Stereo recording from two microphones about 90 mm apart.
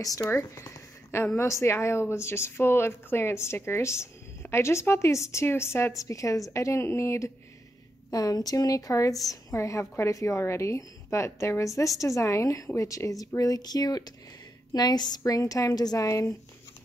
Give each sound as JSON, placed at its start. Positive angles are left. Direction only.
{"t": 0.0, "sound": "a woman's voice", "side_deg": 35}
{"t": 8.1, "sound": "a woman's voice", "side_deg": 45}